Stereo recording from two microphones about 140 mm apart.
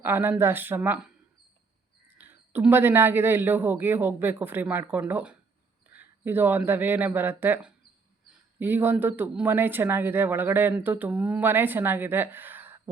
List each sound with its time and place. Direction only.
0.0 s speech: 15° right (ahead or behind)